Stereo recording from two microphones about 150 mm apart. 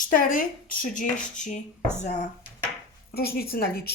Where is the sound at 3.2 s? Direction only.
90° left.